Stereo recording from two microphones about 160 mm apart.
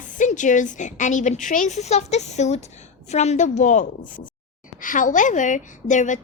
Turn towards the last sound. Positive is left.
turn(degrees=50)  # may be behind; listen again after turning